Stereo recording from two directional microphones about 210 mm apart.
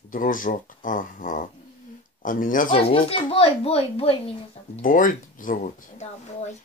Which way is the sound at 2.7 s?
25° left (ahead or behind).